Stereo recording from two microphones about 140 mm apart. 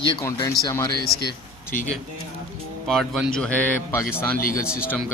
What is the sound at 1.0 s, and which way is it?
Speech, 90° left.